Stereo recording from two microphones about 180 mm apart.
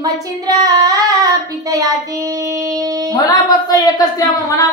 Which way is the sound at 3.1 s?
20° left (ahead or behind).